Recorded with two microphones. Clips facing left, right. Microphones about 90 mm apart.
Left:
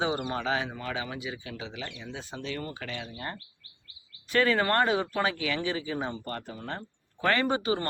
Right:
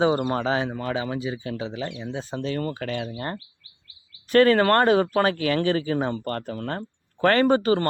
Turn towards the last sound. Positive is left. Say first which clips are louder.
# right 8 dB
turn(degrees=-55)  # may be behind; listen again after turning